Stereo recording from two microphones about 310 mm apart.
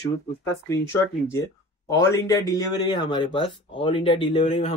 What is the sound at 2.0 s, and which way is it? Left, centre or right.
Speech, centre.